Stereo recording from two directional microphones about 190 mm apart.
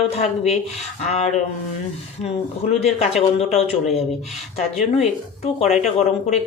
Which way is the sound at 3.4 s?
35° left (ahead or behind).